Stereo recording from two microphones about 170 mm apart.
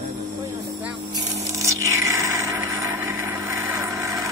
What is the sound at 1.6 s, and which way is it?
Vehicle, 20° right (ahead or behind).